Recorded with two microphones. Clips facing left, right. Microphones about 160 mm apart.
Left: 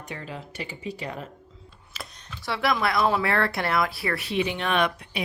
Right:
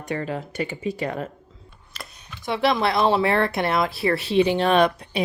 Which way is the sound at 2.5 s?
25° right (ahead or behind).